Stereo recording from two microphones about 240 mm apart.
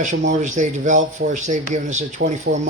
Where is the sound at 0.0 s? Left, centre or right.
Right.